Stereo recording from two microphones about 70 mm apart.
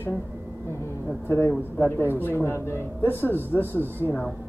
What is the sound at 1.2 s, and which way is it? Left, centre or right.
Speech, left.